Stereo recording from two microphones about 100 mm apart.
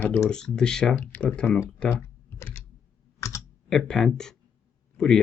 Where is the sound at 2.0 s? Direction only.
25° left (ahead or behind).